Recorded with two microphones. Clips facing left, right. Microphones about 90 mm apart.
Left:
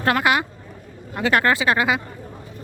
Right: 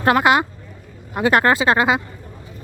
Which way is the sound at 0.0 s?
25° right (ahead or behind).